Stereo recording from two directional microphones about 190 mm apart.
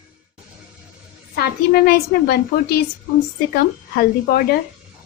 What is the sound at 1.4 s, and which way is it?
Speech, 55° left (ahead or behind).